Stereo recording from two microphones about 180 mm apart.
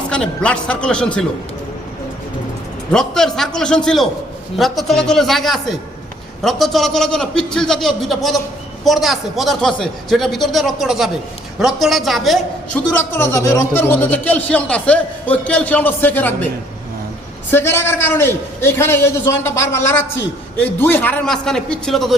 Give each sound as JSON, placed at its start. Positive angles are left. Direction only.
{"t": 0.1, "sound": "a man's voice", "side_deg": 5}
{"t": 2.9, "sound": "a man's voice", "side_deg": 5}
{"t": 12.9, "sound": "a man's voice", "side_deg": 10}
{"t": 17.5, "sound": "a man's voice", "side_deg": 15}